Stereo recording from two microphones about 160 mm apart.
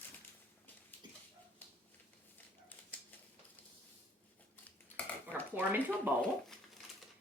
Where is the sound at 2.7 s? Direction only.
10° left (ahead or behind).